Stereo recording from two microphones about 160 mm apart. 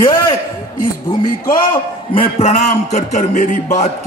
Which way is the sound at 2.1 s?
45° left (ahead or behind).